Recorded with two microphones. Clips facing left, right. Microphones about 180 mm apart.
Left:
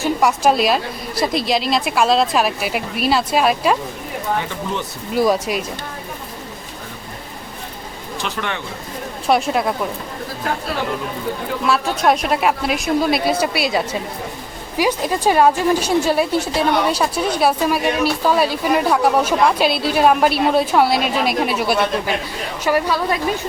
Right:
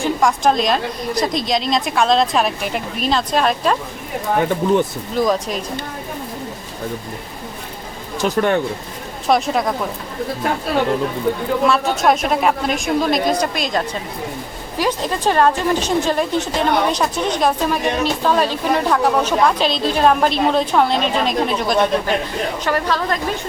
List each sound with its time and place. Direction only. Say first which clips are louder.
0.0 s a woman's voice: even; 5° left (ahead or behind)
4.4 s speech: right 8 dB; 50° right (ahead or behind)
5.1 s a woman's voice: left 1 dB; 10° left (ahead or behind)
8.2 s speech: right 10 dB; 45° right (ahead or behind)
9.2 s speech: even; centre (ahead or behind)
11.7 s a woman's voice: left 4 dB; centre (ahead or behind)